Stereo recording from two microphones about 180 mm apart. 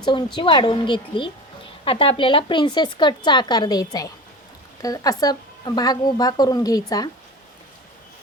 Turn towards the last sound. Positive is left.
turn(degrees=20)  # may be behind; listen again after turning